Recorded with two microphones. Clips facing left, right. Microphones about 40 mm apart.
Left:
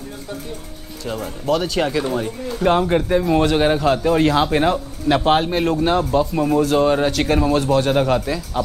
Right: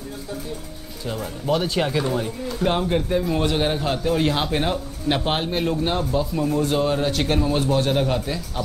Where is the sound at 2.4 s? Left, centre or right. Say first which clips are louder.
Left 7 dB; left.